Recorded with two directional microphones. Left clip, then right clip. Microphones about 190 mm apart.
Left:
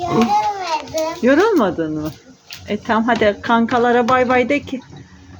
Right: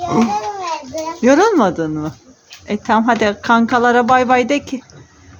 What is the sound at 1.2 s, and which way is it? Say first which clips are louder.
A woman's voice: right 3 dB; 20° right (ahead or behind).